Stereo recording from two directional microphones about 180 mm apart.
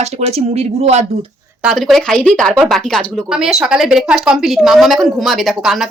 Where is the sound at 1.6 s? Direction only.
Centre (ahead or behind).